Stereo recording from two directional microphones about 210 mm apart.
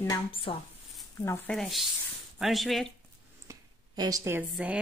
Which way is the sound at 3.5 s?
15° right (ahead or behind).